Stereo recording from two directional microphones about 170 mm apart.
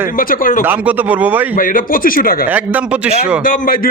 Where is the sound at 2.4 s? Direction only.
10° right (ahead or behind).